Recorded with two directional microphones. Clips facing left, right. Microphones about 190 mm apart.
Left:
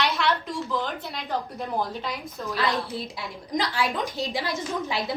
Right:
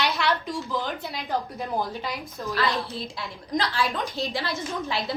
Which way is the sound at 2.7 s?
15° left (ahead or behind).